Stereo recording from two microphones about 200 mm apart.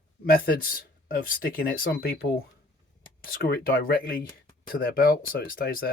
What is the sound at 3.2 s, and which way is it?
Speech, 50° left (ahead or behind).